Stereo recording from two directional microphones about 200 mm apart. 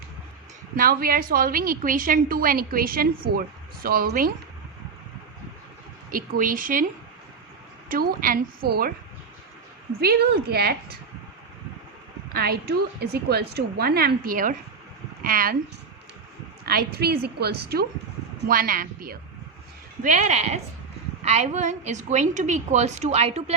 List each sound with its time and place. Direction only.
0.8 s a woman's voice: 50° right (ahead or behind)
6.1 s a woman's voice: 45° right (ahead or behind)
7.9 s a woman's voice: 45° right (ahead or behind)
10.0 s a woman's voice: 50° right (ahead or behind)
12.3 s a woman's voice: 50° right (ahead or behind)
16.6 s a woman's voice: 50° right (ahead or behind); by 23.6 s 30° right (ahead or behind)